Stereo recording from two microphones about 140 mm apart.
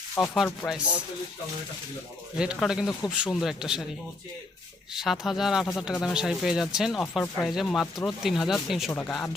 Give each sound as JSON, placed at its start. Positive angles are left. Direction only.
{"t": 0.2, "sound": "speech", "side_deg": 5}
{"t": 0.6, "sound": "speech", "side_deg": 20}
{"t": 2.4, "sound": "speech", "side_deg": -5}
{"t": 4.9, "sound": "speech", "side_deg": 0}
{"t": 8.9, "sound": "speech", "side_deg": 15}